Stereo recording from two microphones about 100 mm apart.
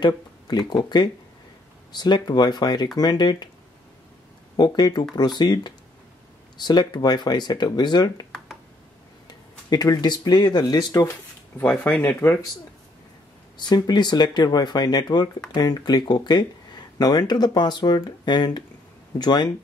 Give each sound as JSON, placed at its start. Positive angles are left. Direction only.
{"t": 0.0, "sound": "speech", "side_deg": 45}
{"t": 4.6, "sound": "speech", "side_deg": 40}
{"t": 9.3, "sound": "speech", "side_deg": 45}
{"t": 11.5, "sound": "speech", "side_deg": 20}
{"t": 13.6, "sound": "speech", "side_deg": 45}